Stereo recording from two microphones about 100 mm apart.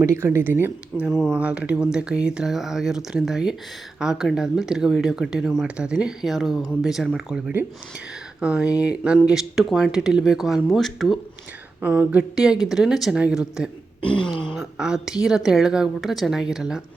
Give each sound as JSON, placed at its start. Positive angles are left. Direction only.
{"t": 0.0, "sound": "speech", "side_deg": -30}
{"t": 11.8, "sound": "speech", "side_deg": -15}